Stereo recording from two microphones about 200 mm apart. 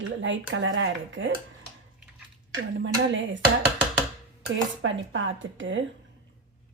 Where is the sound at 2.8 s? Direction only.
70° right (ahead or behind).